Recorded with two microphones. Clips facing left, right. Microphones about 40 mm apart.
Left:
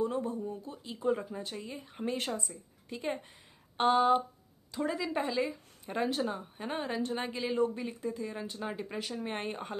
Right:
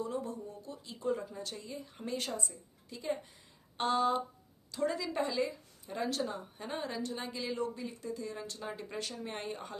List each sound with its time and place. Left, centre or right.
0.0 s speech: left
4.8 s a woman's voice: centre
9.1 s speech: left